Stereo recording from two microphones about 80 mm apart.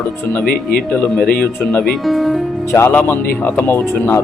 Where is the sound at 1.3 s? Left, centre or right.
Centre.